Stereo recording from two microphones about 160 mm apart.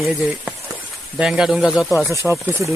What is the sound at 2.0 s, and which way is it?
Speech, 15° right (ahead or behind).